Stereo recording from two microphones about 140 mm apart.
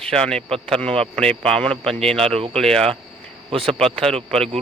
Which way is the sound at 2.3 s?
45° right (ahead or behind).